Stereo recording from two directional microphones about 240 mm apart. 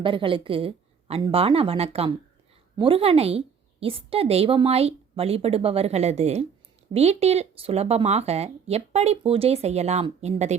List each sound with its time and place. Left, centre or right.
0.0 s speech: right